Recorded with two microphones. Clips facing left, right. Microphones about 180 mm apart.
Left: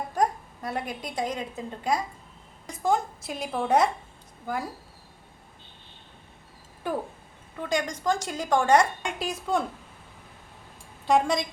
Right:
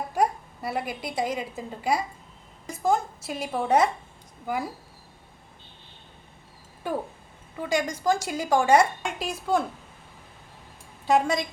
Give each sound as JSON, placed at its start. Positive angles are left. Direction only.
{"t": 0.1, "sound": "a woman's voice", "side_deg": -10}
{"t": 6.8, "sound": "a woman's voice", "side_deg": 0}
{"t": 11.0, "sound": "a woman's voice", "side_deg": 0}